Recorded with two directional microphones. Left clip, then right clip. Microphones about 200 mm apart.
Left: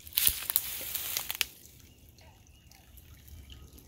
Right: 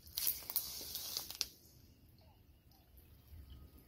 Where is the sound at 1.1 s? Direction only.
15° left (ahead or behind).